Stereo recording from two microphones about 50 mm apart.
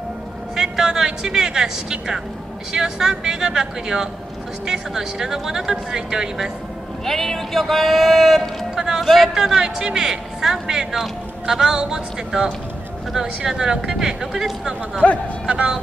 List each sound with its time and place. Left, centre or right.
0.6 s speech: centre
7.1 s speech: centre
8.7 s speech: centre
9.0 s speech: centre
9.3 s speech: centre
15.0 s speech: left
15.4 s speech: centre